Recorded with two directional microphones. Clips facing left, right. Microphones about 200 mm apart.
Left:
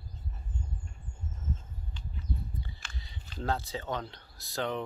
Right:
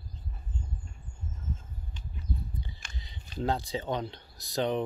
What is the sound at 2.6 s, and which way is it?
Speech, 20° right (ahead or behind).